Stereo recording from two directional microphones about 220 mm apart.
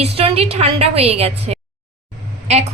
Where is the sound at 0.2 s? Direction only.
25° right (ahead or behind).